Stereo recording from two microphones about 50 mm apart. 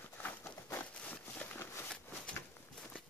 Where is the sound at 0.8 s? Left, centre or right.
Left.